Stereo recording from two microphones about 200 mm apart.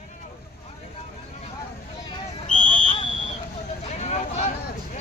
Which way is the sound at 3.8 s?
35° left (ahead or behind).